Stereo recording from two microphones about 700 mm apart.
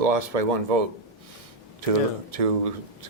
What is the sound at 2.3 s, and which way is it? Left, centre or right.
Speech, right.